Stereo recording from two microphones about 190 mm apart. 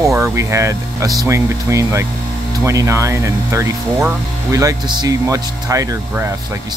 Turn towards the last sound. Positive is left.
turn(degrees=-15)  # may be behind; listen again after turning